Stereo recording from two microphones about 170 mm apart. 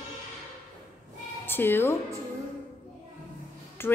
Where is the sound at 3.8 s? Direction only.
15° left (ahead or behind).